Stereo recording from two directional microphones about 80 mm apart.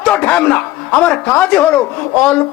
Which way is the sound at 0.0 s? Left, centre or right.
Centre.